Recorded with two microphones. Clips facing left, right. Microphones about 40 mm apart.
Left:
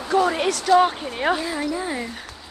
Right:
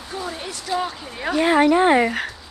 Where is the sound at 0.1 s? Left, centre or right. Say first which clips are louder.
Left 11 dB; left.